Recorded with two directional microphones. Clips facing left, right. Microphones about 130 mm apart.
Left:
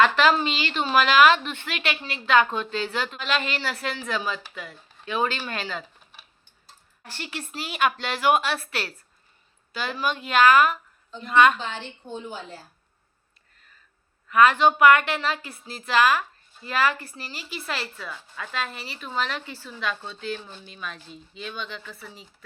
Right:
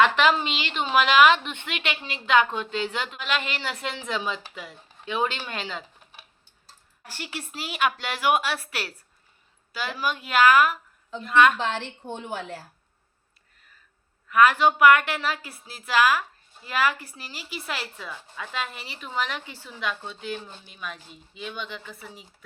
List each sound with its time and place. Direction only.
0.0 s a woman's voice: 15° right (ahead or behind)
11.5 s a woman's voice: 75° right (ahead or behind)
14.3 s a woman's voice: 5° right (ahead or behind)